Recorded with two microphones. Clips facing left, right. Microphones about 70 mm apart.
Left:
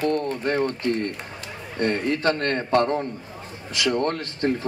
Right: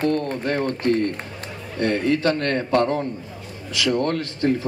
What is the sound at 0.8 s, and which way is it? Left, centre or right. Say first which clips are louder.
Speech: right 7 dB; right.